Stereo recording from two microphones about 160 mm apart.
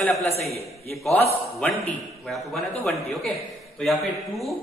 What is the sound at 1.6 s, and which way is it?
Speech, 10° left (ahead or behind).